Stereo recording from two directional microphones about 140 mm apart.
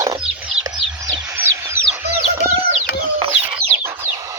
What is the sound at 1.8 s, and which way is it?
Chicken, 75° left (ahead or behind).